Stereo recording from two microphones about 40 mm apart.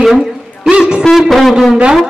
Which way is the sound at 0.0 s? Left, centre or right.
Centre.